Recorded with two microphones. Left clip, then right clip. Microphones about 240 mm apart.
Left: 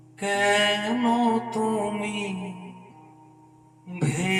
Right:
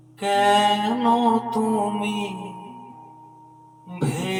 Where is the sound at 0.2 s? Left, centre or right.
Right.